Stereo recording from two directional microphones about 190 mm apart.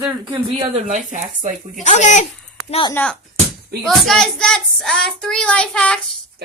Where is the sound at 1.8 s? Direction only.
40° left (ahead or behind).